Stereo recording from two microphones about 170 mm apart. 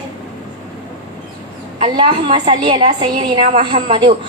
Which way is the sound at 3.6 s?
45° right (ahead or behind).